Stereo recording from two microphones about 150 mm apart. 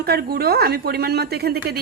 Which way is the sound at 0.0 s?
90° right.